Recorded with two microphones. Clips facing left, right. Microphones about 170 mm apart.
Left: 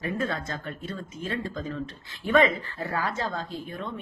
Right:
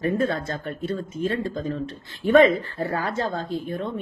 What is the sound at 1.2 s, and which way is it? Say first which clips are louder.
Speech: right 5 dB; 30° right (ahead or behind).